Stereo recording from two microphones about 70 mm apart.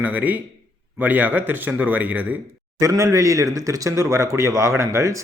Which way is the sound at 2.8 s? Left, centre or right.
Right.